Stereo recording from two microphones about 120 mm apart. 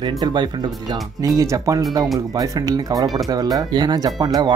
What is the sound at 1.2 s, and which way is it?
Speech, 30° right (ahead or behind).